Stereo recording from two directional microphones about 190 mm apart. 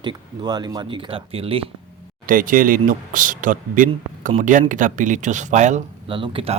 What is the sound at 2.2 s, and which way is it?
Speech, 45° right (ahead or behind).